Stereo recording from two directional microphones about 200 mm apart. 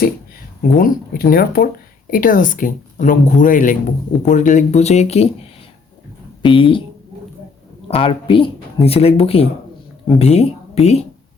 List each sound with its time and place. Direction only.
0.8 s speech: 45° left (ahead or behind)
6.4 s speech: 25° left (ahead or behind)
7.9 s speech: 30° left (ahead or behind)